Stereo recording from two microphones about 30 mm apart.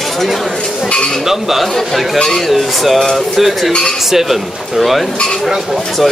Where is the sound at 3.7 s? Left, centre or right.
Left.